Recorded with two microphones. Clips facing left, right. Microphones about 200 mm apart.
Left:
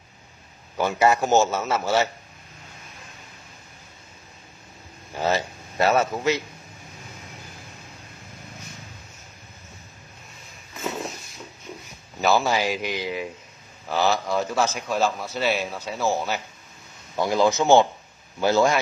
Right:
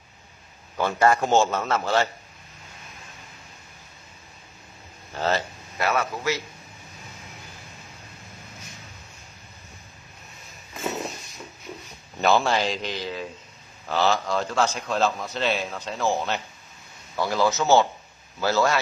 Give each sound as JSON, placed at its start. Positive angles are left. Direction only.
{"t": 0.7, "sound": "a man's voice", "side_deg": 10}
{"t": 5.1, "sound": "a sound", "side_deg": 10}
{"t": 5.8, "sound": "a man's voice", "side_deg": 25}
{"t": 12.2, "sound": "a man's voice", "side_deg": 5}
{"t": 17.2, "sound": "a man's voice", "side_deg": 20}